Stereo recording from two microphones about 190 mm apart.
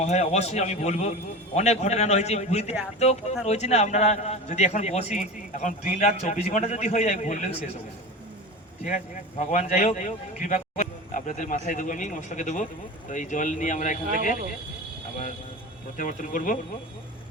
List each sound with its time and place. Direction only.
0.0 s a man's voice: 35° left (ahead or behind)
9.4 s a man's voice: 35° left (ahead or behind)
16.0 s speech: 45° left (ahead or behind)